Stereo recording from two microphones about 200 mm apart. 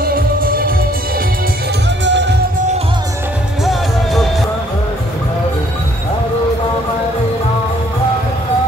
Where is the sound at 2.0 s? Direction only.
60° right (ahead or behind).